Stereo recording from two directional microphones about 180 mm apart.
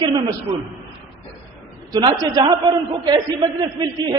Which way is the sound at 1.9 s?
25° right (ahead or behind).